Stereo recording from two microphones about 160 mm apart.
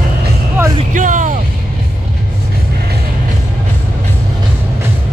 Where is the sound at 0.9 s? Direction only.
55° right (ahead or behind).